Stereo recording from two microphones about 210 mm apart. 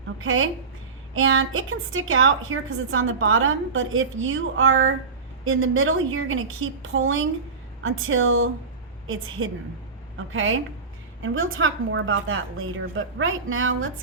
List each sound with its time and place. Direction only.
0.2 s a woman's voice: 70° right (ahead or behind)